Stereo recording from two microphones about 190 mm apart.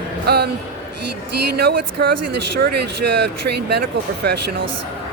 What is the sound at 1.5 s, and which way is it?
Speech, 55° right (ahead or behind).